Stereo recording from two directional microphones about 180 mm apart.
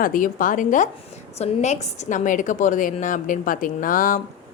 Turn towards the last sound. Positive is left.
turn(degrees=50)  # may be behind; listen again after turning